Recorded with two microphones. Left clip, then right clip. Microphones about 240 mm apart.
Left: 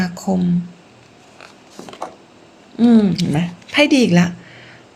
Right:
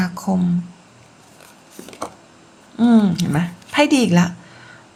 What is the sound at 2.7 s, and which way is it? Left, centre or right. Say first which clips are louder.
Speech: left 2 dB; right.